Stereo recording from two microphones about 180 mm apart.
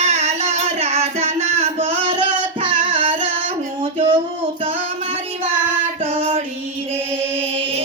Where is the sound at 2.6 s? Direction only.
30° right (ahead or behind).